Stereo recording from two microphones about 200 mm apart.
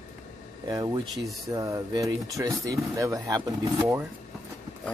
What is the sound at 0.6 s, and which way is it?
Speech, 20° right (ahead or behind).